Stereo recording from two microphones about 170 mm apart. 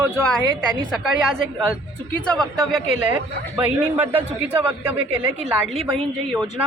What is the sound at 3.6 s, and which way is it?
A man's voice, 10° right (ahead or behind).